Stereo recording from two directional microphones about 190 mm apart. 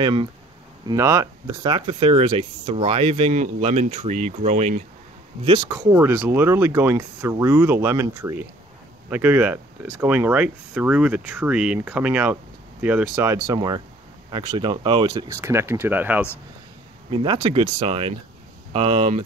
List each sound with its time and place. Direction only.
0.0 s speech: 25° right (ahead or behind)
5.7 s speech: 15° right (ahead or behind)
17.1 s speech: 25° right (ahead or behind)